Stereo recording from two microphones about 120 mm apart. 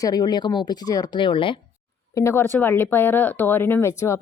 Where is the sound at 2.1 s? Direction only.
20° left (ahead or behind).